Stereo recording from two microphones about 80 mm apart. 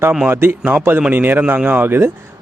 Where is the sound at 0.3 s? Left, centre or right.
Right.